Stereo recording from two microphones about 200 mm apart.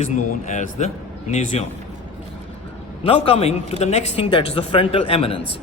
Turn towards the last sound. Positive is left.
turn(degrees=30)  # may be behind; listen again after turning